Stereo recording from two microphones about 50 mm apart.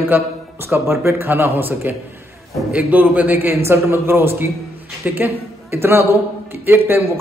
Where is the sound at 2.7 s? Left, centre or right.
Right.